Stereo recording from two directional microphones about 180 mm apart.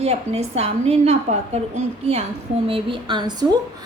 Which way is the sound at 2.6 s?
30° right (ahead or behind).